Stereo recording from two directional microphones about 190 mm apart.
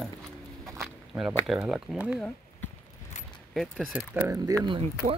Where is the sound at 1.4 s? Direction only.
5° right (ahead or behind).